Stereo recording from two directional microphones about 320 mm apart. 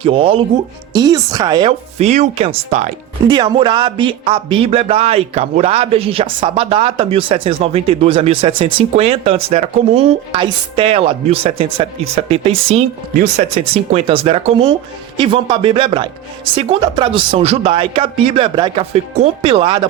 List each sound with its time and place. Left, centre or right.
0.0 s speech: centre